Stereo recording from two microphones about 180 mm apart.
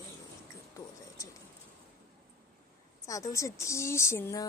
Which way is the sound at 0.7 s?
20° left (ahead or behind).